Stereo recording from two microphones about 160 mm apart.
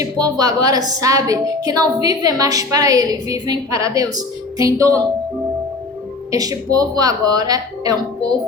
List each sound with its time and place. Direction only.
0.0 s a woman's voice: 25° right (ahead or behind)
6.3 s a woman's voice: 20° right (ahead or behind)